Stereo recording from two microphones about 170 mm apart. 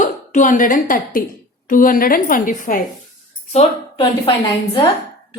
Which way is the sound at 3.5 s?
30° left (ahead or behind).